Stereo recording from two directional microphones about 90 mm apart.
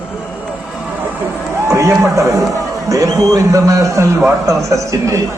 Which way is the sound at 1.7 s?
35° right (ahead or behind).